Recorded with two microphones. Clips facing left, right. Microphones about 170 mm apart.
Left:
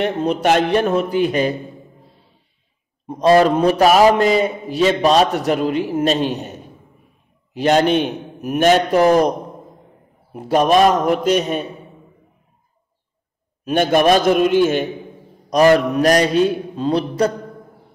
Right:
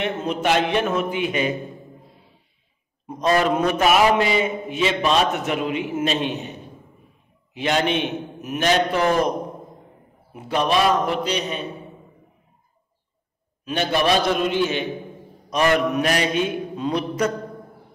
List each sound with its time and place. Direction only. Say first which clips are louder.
0.0 s a man's voice: left 5 dB; 40° left (ahead or behind)
3.1 s a man's voice: left 7 dB; 35° left (ahead or behind)
7.5 s a man's voice: left 7 dB; 40° left (ahead or behind)
10.3 s a man's voice: left 6 dB; 40° left (ahead or behind)
13.7 s a man's voice: left 7 dB; 45° left (ahead or behind)
15.5 s a man's voice: left 6 dB; 35° left (ahead or behind)